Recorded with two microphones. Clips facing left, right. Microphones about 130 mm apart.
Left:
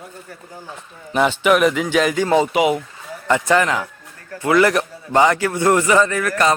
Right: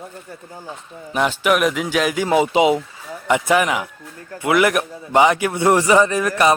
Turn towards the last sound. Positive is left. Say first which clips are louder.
# right 1 dB
turn(degrees=-15)  # may be behind; listen again after turning